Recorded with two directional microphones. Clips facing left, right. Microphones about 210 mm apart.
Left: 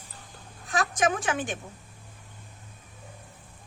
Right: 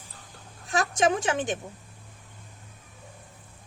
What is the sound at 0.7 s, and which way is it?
Speech, 25° right (ahead or behind).